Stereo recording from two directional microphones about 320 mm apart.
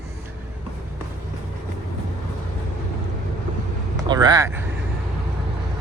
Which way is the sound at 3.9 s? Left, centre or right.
Centre.